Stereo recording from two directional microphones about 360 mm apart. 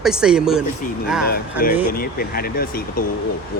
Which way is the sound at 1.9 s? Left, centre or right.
Left.